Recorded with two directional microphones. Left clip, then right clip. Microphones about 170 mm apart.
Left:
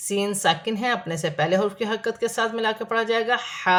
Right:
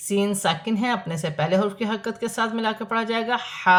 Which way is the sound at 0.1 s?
15° left (ahead or behind).